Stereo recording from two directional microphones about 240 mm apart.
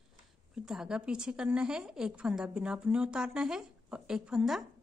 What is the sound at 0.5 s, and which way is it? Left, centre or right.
A woman's voice, centre.